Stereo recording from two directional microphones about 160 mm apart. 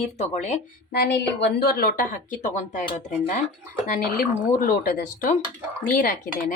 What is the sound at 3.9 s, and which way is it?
Speech, 65° left (ahead or behind).